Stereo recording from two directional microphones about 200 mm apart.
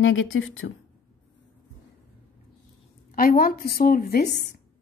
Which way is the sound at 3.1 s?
45° left (ahead or behind).